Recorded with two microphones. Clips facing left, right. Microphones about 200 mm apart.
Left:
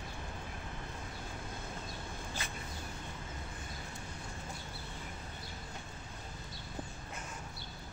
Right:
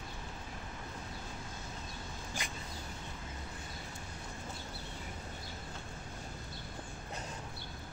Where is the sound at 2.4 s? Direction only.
15° right (ahead or behind).